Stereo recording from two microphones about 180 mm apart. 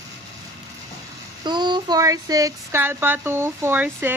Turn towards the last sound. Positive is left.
turn(degrees=-10)  # may be behind; listen again after turning